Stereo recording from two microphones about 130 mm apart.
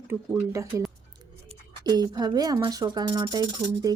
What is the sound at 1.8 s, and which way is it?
Speech, 30° right (ahead or behind).